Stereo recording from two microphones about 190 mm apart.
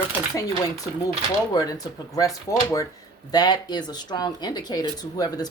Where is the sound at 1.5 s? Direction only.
20° left (ahead or behind).